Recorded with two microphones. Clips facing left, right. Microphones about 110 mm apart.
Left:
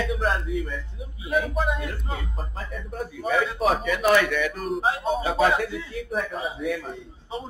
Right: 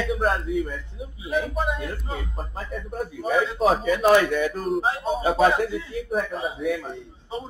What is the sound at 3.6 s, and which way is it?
Speech, 30° right (ahead or behind).